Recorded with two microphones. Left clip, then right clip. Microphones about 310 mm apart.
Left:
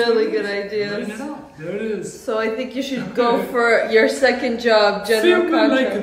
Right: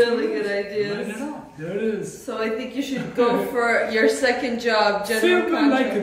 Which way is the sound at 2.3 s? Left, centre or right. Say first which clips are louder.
Left 5 dB; centre.